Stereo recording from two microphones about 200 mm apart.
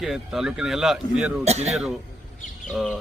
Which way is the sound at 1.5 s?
35° right (ahead or behind).